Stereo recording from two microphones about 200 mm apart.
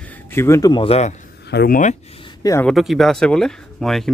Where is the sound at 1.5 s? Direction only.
55° left (ahead or behind).